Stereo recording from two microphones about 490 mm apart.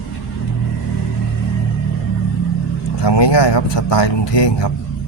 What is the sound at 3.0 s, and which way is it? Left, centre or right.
Speech, left.